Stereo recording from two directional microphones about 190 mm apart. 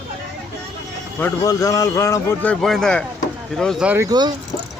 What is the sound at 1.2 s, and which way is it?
A man's voice, 15° left (ahead or behind).